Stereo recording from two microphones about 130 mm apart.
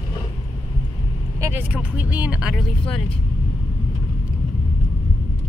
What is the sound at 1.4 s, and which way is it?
Vehicle, 20° right (ahead or behind).